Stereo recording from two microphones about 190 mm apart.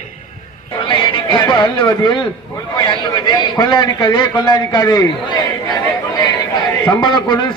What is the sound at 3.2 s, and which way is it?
A man's voice, 25° left (ahead or behind).